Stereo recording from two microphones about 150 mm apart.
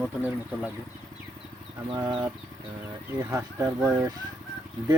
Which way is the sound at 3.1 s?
15° right (ahead or behind).